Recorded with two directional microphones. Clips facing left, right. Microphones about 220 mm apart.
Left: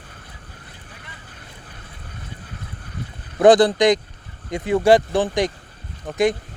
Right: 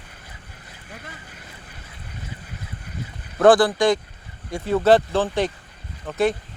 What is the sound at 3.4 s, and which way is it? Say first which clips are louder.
Speech: left 2 dB; 20° left (ahead or behind).